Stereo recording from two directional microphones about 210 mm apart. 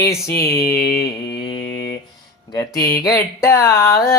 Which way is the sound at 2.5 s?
15° left (ahead or behind).